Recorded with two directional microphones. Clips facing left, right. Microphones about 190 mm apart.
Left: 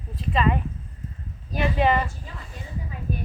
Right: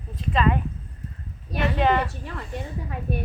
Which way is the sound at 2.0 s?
65° right (ahead or behind).